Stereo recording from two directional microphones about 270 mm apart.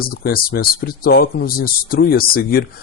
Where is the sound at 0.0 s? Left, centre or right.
Left.